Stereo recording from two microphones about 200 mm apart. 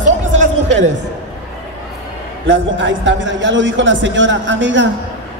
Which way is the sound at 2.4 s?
70° right (ahead or behind).